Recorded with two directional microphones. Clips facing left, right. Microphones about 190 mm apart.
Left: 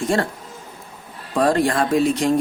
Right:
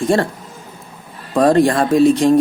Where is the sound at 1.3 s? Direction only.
35° right (ahead or behind).